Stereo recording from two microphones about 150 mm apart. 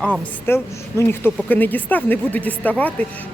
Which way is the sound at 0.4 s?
15° left (ahead or behind).